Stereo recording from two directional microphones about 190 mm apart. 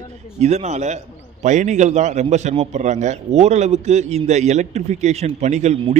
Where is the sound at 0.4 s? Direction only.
35° right (ahead or behind).